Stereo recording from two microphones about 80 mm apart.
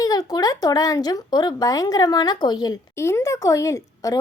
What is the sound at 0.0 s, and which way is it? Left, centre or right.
Speech, left.